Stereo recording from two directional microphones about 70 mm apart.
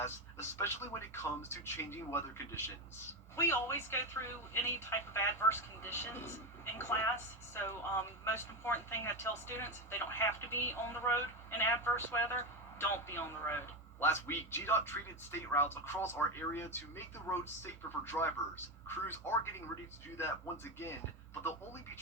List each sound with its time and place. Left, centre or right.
0.0 s speech: left